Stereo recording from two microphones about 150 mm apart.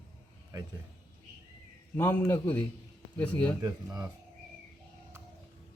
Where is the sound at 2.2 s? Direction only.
20° left (ahead or behind).